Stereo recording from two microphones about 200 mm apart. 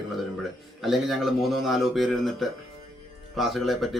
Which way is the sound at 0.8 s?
Centre (ahead or behind).